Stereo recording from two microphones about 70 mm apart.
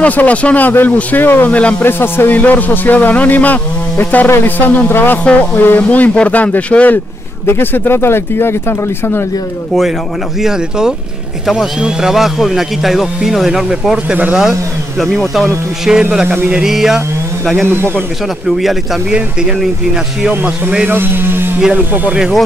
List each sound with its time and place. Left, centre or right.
0.0 s speech: left
1.9 s speech: left
5.2 s speech: centre; by 9.2 s left
10.4 s speech: centre
14.0 s speech: right
15.0 s speech: centre
17.6 s speech: right
18.6 s speech: centre
20.9 s speech: right